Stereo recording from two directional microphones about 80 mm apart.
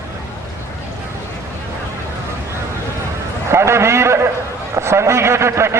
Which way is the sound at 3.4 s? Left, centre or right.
Right.